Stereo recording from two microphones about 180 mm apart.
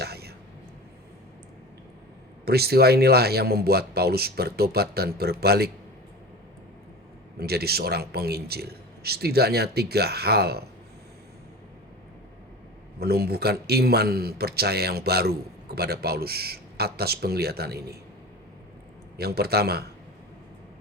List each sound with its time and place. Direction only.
0.0 s a sound: 60° right (ahead or behind)
2.4 s a man's voice: 60° right (ahead or behind)
7.3 s a man's voice: 60° right (ahead or behind)
13.0 s a man's voice: 60° right (ahead or behind)
19.1 s a man's voice: 60° right (ahead or behind)